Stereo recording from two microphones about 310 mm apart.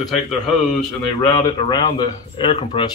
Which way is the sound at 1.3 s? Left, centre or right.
Centre.